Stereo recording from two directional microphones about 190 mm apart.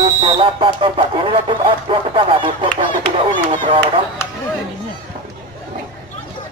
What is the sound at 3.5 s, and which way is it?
Speech, 30° right (ahead or behind).